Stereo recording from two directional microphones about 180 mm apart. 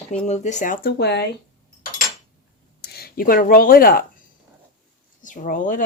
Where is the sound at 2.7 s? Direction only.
60° left (ahead or behind).